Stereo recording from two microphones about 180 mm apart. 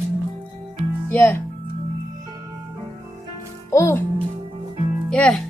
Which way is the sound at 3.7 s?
15° left (ahead or behind).